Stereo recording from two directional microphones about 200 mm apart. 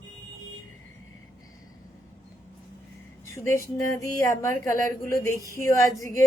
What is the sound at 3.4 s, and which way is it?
Speech, 15° left (ahead or behind).